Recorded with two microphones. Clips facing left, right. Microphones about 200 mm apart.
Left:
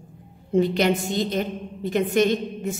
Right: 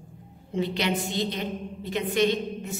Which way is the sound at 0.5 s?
50° left (ahead or behind).